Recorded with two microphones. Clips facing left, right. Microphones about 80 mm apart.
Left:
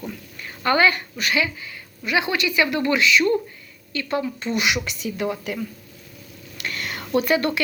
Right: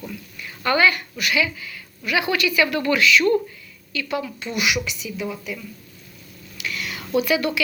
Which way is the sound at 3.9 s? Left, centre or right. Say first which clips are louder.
Left 2 dB; left.